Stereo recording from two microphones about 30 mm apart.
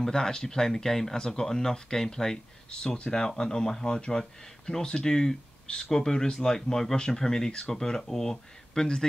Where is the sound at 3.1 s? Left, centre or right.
Left.